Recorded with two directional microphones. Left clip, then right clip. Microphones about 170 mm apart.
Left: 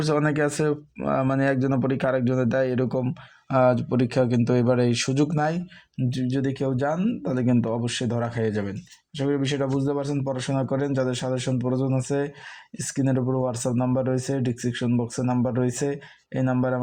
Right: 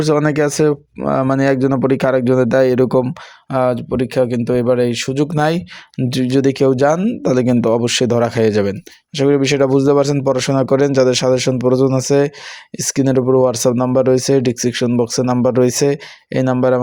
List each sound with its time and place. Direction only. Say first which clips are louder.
0.0 s speech: right 8 dB; 25° right (ahead or behind)
3.5 s speech: right 4 dB; 15° right (ahead or behind)
6.1 s speech: right 12 dB; 45° right (ahead or behind)